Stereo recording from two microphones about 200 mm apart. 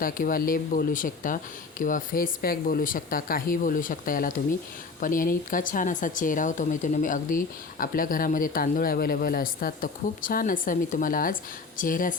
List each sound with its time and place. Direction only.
0.0 s speech: 45° left (ahead or behind)